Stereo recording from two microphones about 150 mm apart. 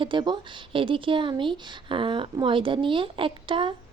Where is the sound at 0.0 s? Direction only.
30° right (ahead or behind).